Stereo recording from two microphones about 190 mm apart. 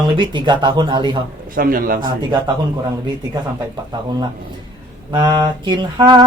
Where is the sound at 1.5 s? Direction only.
50° right (ahead or behind).